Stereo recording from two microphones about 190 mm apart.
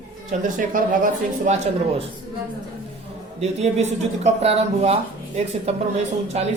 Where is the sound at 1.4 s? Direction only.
35° right (ahead or behind).